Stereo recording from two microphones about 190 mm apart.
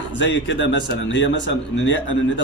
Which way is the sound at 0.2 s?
70° left (ahead or behind).